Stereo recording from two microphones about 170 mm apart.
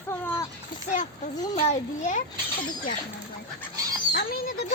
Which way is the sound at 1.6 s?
45° left (ahead or behind).